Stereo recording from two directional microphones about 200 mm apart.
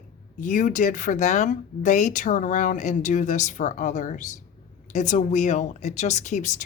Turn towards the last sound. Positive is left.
turn(degrees=35)  # may be behind; listen again after turning